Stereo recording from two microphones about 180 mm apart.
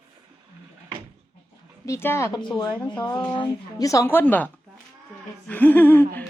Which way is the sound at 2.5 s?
20° left (ahead or behind).